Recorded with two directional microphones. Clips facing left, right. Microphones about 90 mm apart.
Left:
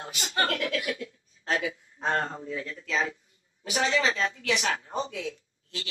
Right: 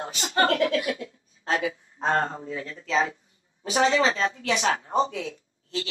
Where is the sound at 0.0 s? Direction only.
30° right (ahead or behind).